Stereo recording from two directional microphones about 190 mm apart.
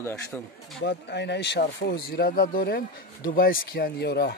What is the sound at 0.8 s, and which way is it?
A man's voice, 65° left (ahead or behind).